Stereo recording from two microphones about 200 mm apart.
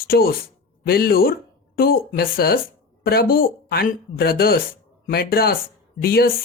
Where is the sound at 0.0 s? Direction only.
45° left (ahead or behind).